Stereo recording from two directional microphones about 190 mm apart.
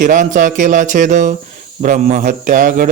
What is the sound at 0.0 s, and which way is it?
Mantra, 45° right (ahead or behind).